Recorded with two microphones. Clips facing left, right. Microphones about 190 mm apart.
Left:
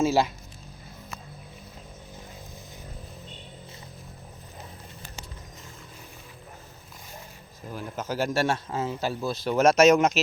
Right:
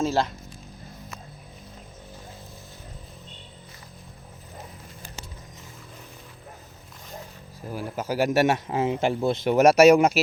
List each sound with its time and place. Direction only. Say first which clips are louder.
0.0 s speech: left 2 dB; 5° left (ahead or behind)
7.7 s speech: right 3 dB; 10° right (ahead or behind)